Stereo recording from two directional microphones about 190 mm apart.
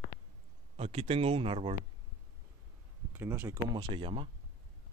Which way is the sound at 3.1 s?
10° right (ahead or behind).